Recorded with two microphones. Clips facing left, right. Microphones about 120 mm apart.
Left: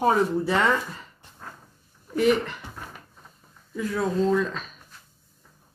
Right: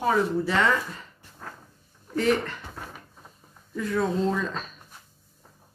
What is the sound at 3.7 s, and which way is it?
Speech, 5° left (ahead or behind).